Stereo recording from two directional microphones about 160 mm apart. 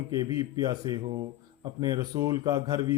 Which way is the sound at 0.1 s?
20° right (ahead or behind).